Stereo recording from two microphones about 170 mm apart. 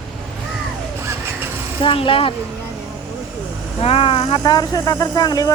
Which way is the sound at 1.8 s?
30° left (ahead or behind).